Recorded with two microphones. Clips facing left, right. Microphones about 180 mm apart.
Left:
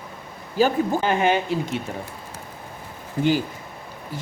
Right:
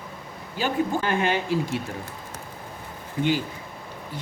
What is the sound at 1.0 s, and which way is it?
Speech, 20° left (ahead or behind).